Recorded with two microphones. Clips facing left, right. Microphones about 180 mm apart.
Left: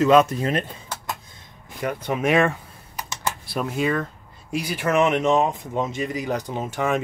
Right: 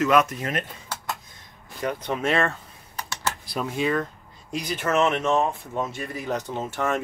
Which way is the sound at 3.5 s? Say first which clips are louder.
Left 1 dB; centre (ahead or behind).